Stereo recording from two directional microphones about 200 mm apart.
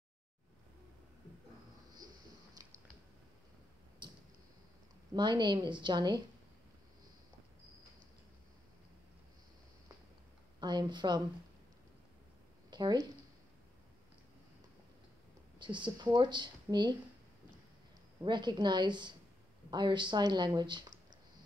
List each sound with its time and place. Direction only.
4.0 s a sound: 25° right (ahead or behind)
5.1 s speech: 20° right (ahead or behind)
10.6 s a woman's voice: 20° right (ahead or behind)
12.6 s a sound: 20° right (ahead or behind)
15.6 s speech: 25° right (ahead or behind)
18.2 s speech: 20° right (ahead or behind)